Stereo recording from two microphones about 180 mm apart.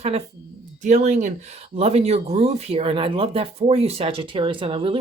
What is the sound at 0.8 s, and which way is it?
Speech, 40° right (ahead or behind).